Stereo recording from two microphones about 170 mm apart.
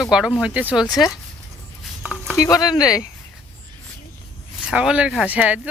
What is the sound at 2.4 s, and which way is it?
Speech, 20° left (ahead or behind).